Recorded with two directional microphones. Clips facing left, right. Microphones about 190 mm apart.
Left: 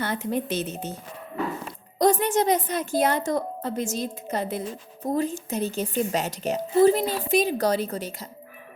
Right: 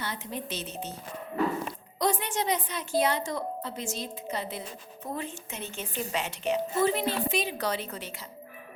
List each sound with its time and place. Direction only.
0.0 s a woman's voice: 50° left (ahead or behind)
2.0 s a woman's voice: 40° left (ahead or behind)